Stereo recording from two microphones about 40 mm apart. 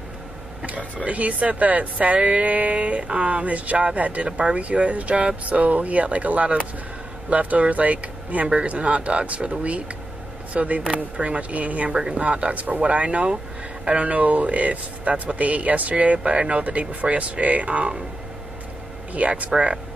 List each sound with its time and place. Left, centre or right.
1.0 s speech: right
19.1 s speech: right